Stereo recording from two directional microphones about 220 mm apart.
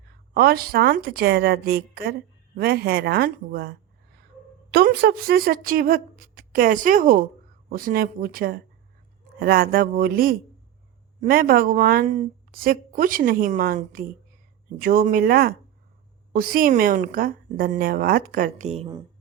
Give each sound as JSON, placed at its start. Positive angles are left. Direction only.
{"t": 0.3, "sound": "a woman's voice", "side_deg": -45}